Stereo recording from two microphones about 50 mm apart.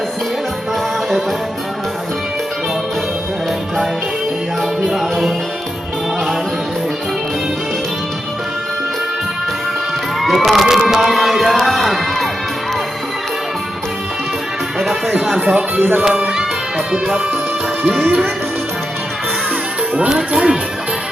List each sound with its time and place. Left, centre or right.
4.8 s music: centre
10.2 s speech: centre
11.5 s crowd: centre
14.8 s music: centre
15.5 s speech: right
16.0 s music: centre
16.9 s speech: centre
20.1 s speech: centre